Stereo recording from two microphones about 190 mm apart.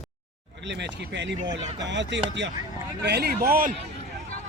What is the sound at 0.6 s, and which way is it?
Speech, 65° right (ahead or behind).